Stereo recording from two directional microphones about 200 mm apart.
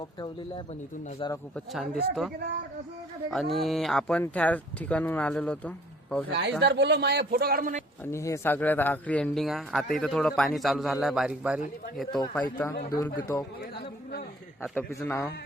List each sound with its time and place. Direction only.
0.0 s speech: 20° left (ahead or behind)
1.5 s speech: centre (ahead or behind)
3.3 s speech: centre (ahead or behind)
6.6 s speech: 55° right (ahead or behind); by 7.9 s 40° right (ahead or behind)
8.1 s speech: 15° left (ahead or behind); by 11.6 s 5° right (ahead or behind)
12.3 s a man's voice: 10° left (ahead or behind)
12.7 s speech: 55° left (ahead or behind)
13.1 s a man's voice: 15° left (ahead or behind)
14.8 s a man's voice: 10° left (ahead or behind)